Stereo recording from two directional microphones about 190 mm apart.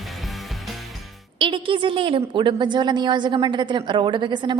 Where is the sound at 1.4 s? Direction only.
25° right (ahead or behind).